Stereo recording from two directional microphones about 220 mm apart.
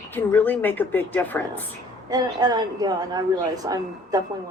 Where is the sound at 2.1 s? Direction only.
15° right (ahead or behind).